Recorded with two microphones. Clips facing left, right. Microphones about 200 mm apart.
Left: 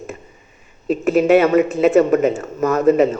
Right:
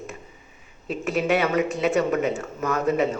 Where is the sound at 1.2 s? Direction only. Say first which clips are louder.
Left 9 dB; 45° left (ahead or behind).